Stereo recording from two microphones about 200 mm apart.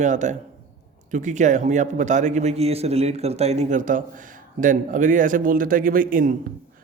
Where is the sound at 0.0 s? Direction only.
35° right (ahead or behind).